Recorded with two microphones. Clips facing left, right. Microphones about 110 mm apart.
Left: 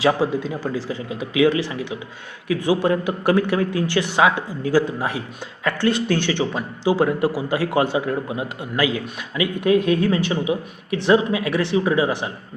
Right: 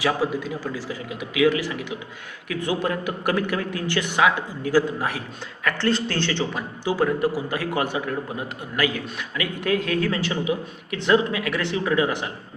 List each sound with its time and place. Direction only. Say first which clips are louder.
0.0 s speech: left 4 dB; 25° left (ahead or behind)